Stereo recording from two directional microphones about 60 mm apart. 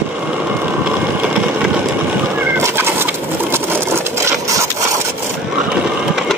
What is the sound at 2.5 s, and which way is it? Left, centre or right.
Fowl, right.